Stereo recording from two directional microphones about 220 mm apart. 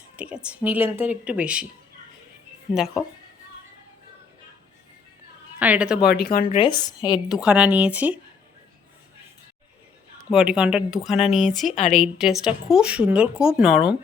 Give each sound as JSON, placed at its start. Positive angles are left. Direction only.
{"t": 0.2, "sound": "speech", "side_deg": -5}
{"t": 2.7, "sound": "speech", "side_deg": 0}
{"t": 5.5, "sound": "speech", "side_deg": -5}
{"t": 6.1, "sound": "speech", "side_deg": 45}
{"t": 6.5, "sound": "speech", "side_deg": 20}
{"t": 7.3, "sound": "speech", "side_deg": -5}
{"t": 10.2, "sound": "speech", "side_deg": -5}